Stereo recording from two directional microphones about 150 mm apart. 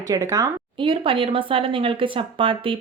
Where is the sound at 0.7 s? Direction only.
35° right (ahead or behind).